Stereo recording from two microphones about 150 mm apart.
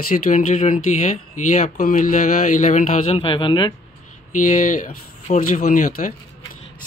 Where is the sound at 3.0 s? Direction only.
40° left (ahead or behind).